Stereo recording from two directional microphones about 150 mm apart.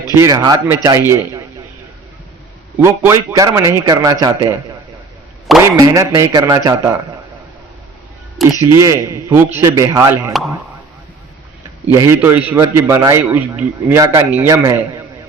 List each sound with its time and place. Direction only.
0.1 s a man's voice: 20° right (ahead or behind)
2.8 s a man's voice: 15° right (ahead or behind)
5.6 s a man's voice: 25° right (ahead or behind)
8.4 s speech: centre (ahead or behind)
8.8 s a man's voice: 20° right (ahead or behind)
11.9 s a man's voice: 15° right (ahead or behind)